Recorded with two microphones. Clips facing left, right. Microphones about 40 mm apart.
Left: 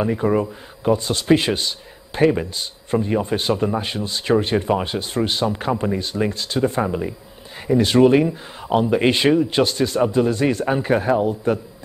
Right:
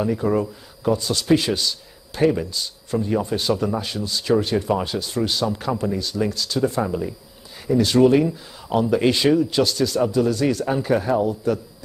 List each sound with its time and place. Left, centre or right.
0.0 s speech: left